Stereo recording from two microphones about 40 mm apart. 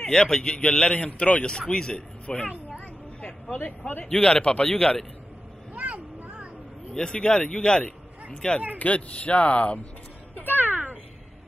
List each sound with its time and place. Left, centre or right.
0.1 s a man's voice: centre
2.2 s a child's voice: left
2.8 s a sound: left
3.5 s speech: left
4.0 s a man's voice: left
5.8 s vehicle: right
6.9 s a man's voice: centre
8.7 s speech: left
10.5 s a sound: right